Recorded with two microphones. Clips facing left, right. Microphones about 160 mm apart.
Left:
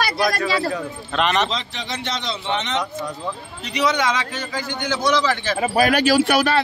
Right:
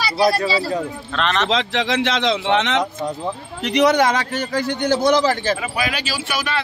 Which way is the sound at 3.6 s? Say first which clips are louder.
Right 6 dB; 60° right (ahead or behind).